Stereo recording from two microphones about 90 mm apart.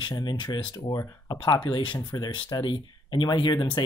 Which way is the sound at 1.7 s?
55° left (ahead or behind).